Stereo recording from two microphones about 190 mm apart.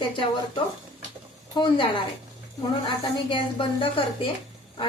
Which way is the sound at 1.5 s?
25° left (ahead or behind).